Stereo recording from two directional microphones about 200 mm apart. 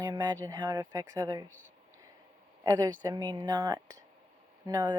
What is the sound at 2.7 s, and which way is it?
Speech, 15° right (ahead or behind).